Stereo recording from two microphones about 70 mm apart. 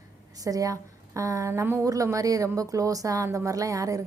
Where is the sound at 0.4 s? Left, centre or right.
Right.